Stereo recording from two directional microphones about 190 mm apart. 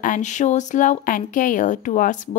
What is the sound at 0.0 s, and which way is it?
Speech, 40° left (ahead or behind).